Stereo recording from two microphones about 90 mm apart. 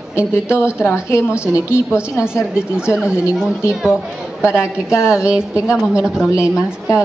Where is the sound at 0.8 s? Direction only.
30° left (ahead or behind).